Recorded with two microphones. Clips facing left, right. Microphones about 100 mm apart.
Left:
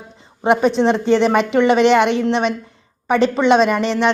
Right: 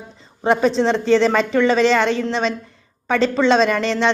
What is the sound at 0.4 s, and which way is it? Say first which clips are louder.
A woman's voice: left 2 dB; 15° left (ahead or behind).